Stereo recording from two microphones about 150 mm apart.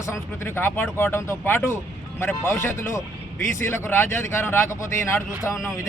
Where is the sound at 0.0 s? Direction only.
15° left (ahead or behind).